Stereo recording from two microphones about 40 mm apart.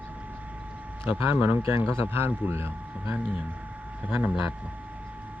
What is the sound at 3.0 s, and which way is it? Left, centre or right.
Speech, right.